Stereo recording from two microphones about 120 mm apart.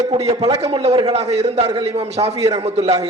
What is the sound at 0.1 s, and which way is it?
A man's voice, 65° right (ahead or behind).